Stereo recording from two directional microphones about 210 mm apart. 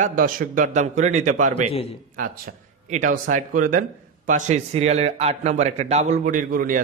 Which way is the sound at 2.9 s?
35° right (ahead or behind).